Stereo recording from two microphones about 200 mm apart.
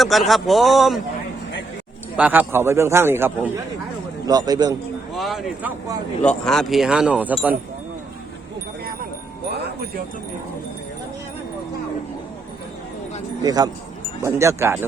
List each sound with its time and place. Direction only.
0.0 s speech: centre (ahead or behind)
2.1 s a man's voice: 5° right (ahead or behind)
5.1 s a sound: centre (ahead or behind)
6.2 s speech: centre (ahead or behind)
13.4 s a man's voice: 20° right (ahead or behind)